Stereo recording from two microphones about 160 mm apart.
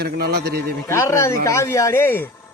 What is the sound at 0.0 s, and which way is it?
Speech, 80° right.